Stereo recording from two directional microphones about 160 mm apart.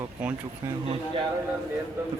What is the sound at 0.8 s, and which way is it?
Speech, 35° right (ahead or behind).